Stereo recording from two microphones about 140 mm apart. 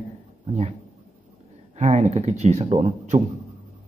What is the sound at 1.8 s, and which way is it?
Speech, 55° right (ahead or behind).